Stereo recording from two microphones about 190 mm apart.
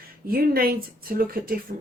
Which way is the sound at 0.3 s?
50° right (ahead or behind).